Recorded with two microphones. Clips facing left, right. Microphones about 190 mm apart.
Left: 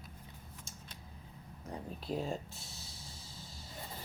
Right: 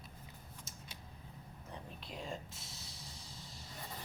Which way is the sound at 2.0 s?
35° left (ahead or behind).